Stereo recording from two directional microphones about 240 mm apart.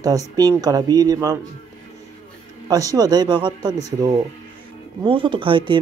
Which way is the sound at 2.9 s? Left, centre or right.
Centre.